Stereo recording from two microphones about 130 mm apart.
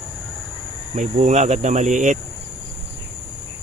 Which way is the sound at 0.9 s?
70° right (ahead or behind).